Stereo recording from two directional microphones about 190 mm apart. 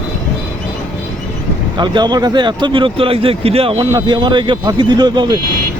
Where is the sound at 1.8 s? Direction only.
25° right (ahead or behind).